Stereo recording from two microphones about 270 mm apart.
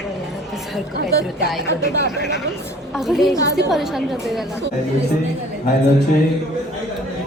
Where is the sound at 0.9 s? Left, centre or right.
Right.